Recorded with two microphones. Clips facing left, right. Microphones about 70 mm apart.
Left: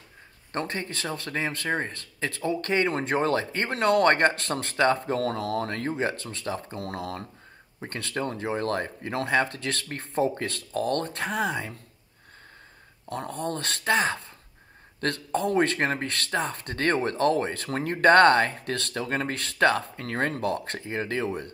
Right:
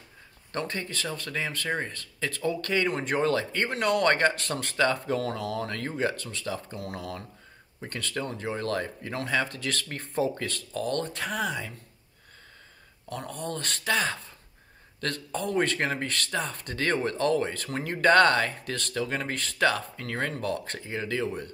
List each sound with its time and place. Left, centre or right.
0.5 s speech: left
9.4 s speech: left
13.1 s speech: left
13.9 s speech: left
15.0 s speech: left